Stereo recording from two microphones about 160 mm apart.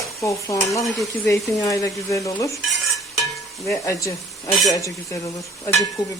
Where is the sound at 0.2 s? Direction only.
20° left (ahead or behind).